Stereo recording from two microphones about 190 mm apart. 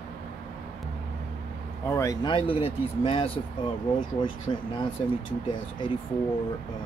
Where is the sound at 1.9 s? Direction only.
15° left (ahead or behind).